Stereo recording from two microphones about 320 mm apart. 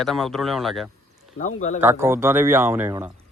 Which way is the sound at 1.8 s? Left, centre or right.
Centre.